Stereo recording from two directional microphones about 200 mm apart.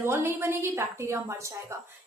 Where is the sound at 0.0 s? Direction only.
15° right (ahead or behind).